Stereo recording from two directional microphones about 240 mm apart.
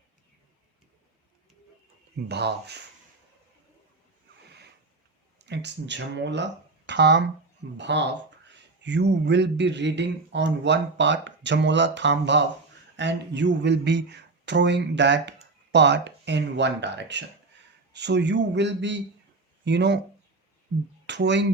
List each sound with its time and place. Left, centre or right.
2.1 s speech: right
5.5 s speech: right
21.1 s speech: right